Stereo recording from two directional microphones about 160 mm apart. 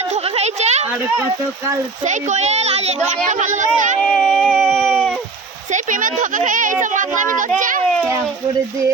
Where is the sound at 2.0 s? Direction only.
50° right (ahead or behind).